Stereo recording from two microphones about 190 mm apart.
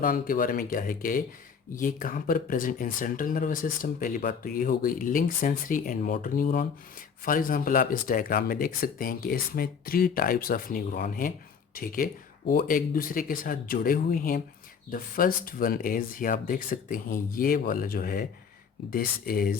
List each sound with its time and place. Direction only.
0.0 s speech: 50° left (ahead or behind)